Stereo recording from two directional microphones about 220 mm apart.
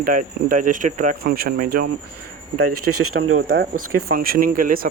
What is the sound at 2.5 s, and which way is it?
Speech, 90° right.